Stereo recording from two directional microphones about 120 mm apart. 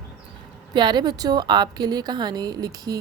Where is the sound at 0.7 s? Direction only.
40° right (ahead or behind).